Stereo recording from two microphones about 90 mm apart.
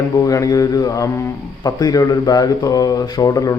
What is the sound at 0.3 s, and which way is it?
A man's voice, 40° left (ahead or behind).